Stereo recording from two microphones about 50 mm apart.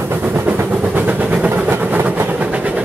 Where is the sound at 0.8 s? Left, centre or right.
Right.